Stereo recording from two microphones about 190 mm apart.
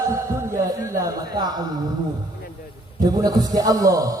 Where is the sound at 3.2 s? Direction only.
20° right (ahead or behind).